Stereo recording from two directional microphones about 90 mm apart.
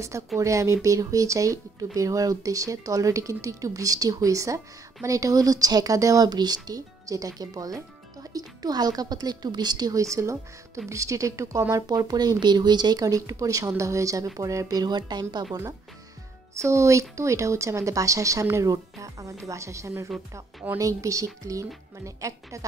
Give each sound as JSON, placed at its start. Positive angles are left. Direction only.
{"t": 0.4, "sound": "speech", "side_deg": -35}
{"t": 11.8, "sound": "speech", "side_deg": -50}
{"t": 16.5, "sound": "speech", "side_deg": -35}